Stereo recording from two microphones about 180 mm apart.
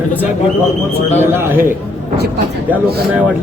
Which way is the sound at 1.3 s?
10° right (ahead or behind).